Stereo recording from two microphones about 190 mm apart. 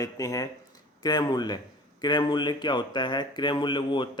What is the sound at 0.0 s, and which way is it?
Speech, 20° left (ahead or behind).